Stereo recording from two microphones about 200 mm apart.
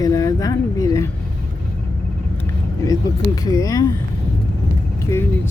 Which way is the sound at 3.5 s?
15° left (ahead or behind).